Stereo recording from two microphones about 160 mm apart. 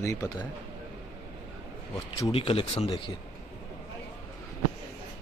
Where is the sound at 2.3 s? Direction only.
35° left (ahead or behind).